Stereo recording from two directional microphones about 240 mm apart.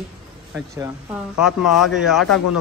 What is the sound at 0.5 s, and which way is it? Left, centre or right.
A woman's voice, centre.